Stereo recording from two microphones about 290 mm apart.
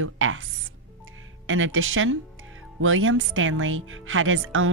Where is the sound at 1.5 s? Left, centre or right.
Right.